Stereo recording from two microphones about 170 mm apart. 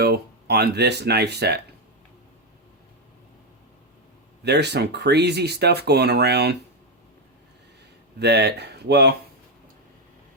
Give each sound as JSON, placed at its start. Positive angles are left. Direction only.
{"t": 0.0, "sound": "speech", "side_deg": -70}
{"t": 4.4, "sound": "speech", "side_deg": -80}
{"t": 8.2, "sound": "speech", "side_deg": -80}